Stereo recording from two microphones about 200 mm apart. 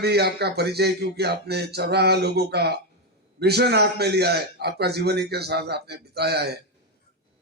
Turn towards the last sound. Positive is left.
turn(degrees=-55)  # may be behind; listen again after turning